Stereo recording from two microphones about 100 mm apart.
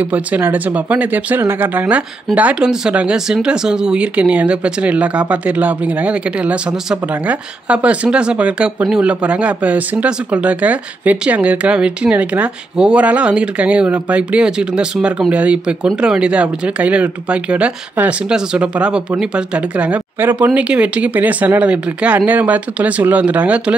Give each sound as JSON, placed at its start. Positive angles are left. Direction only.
{"t": 0.0, "sound": "speech", "side_deg": -15}